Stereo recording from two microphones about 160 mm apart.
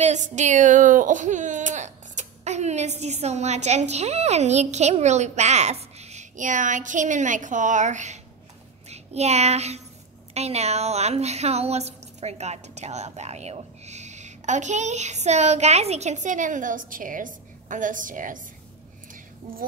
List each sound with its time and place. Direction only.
0.0 s a child's voice: 45° right (ahead or behind)